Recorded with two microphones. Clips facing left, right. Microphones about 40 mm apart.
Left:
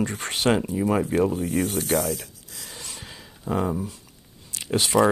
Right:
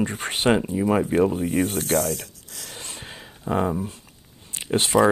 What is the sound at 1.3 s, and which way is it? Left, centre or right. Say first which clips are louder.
Speech: right 2 dB; right.